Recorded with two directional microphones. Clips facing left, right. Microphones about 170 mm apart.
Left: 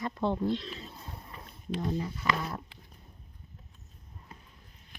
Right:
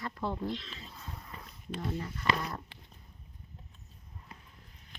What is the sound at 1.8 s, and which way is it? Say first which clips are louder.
Speech: left 4 dB; 10° left (ahead or behind).